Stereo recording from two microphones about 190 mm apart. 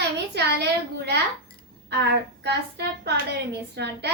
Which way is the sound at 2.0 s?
60° right (ahead or behind).